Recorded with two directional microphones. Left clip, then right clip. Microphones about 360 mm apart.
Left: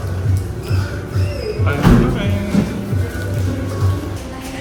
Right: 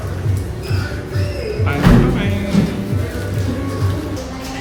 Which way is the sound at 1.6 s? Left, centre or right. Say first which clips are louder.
Even; centre.